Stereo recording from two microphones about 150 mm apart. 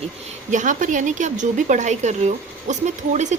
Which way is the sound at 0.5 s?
60° right (ahead or behind).